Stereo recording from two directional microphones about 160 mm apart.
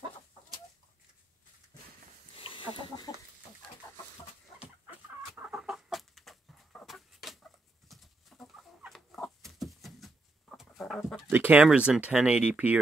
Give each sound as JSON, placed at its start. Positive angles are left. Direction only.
{"t": 2.7, "sound": "chicken", "side_deg": 30}
{"t": 5.3, "sound": "chicken", "side_deg": -5}
{"t": 11.2, "sound": "speech", "side_deg": -15}